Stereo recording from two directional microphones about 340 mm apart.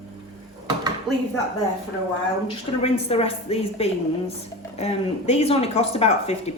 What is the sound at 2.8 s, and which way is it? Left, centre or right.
A woman's voice, centre.